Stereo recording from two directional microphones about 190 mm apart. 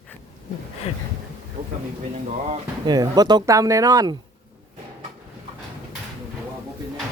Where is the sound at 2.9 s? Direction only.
20° right (ahead or behind).